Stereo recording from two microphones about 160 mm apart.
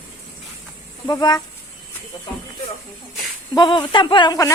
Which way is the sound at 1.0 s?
25° left (ahead or behind).